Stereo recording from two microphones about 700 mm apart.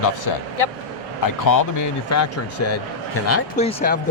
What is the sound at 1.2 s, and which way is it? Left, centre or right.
Speech, left.